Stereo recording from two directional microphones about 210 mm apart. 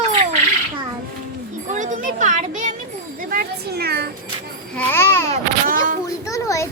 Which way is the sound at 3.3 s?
50° right (ahead or behind).